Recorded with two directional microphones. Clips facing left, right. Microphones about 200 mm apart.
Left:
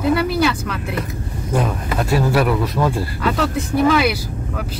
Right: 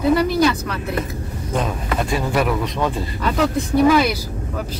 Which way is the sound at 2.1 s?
5° left (ahead or behind).